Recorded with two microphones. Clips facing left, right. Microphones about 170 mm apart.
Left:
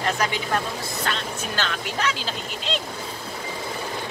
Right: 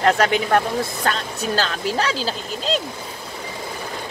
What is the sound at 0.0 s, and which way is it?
Speech, 70° right (ahead or behind).